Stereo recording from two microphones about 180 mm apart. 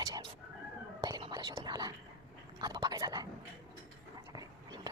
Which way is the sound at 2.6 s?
25° right (ahead or behind).